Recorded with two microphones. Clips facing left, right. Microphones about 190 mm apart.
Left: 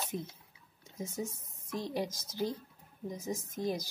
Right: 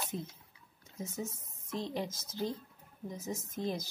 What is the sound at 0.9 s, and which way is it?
A woman's voice, 10° left (ahead or behind).